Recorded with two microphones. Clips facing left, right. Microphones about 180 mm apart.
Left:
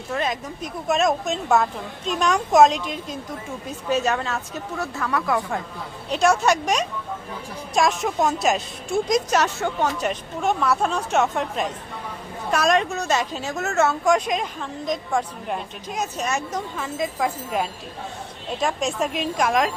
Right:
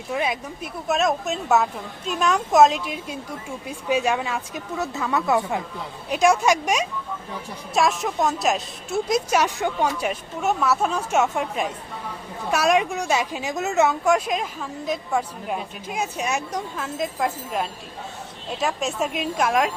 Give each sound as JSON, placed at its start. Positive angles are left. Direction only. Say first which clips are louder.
{"t": 0.1, "sound": "speech", "louder": "even", "side_deg": -10}
{"t": 6.1, "sound": "speech", "louder": "right 1 dB", "side_deg": -10}
{"t": 16.8, "sound": "a woman's voice", "louder": "left 1 dB", "side_deg": 0}